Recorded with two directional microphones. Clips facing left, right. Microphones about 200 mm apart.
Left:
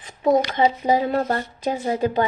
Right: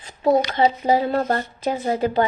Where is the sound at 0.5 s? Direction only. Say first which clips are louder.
Right 1 dB; 15° left (ahead or behind).